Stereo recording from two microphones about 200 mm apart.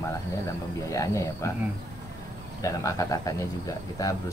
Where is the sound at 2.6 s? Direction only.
15° left (ahead or behind).